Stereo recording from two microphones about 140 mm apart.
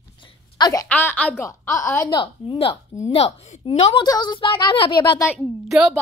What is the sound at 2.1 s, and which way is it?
A woman's voice, 35° left (ahead or behind).